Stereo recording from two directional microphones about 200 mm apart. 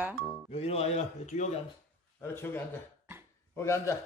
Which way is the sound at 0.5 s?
30° left (ahead or behind).